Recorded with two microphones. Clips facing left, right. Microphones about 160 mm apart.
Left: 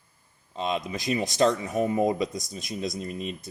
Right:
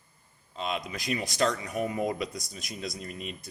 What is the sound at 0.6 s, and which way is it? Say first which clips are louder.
Speech: left 4 dB; 25° left (ahead or behind).